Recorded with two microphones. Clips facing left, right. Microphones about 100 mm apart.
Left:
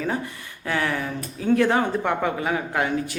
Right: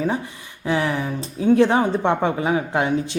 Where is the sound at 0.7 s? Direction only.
20° right (ahead or behind).